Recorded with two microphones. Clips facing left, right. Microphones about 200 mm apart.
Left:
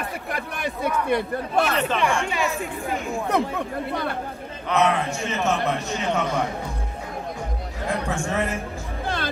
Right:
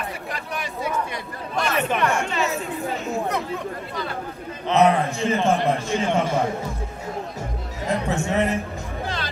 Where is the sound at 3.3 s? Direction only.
55° left (ahead or behind).